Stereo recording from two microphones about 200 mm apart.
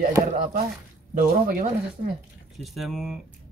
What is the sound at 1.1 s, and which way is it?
Speech, 45° right (ahead or behind).